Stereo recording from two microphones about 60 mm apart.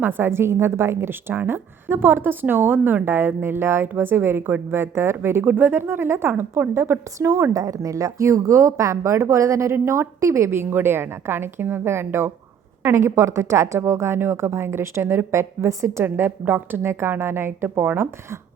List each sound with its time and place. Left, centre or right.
0.0 s a woman's voice: right
5.5 s a woman's voice: right
7.6 s a woman's voice: right
16.0 s a woman's voice: right